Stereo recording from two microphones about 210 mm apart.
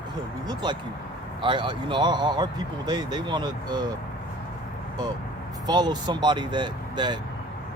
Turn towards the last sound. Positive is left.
turn(degrees=-20)  # may be behind; listen again after turning